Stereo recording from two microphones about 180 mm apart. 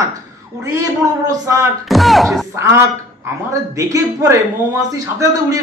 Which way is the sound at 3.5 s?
20° right (ahead or behind).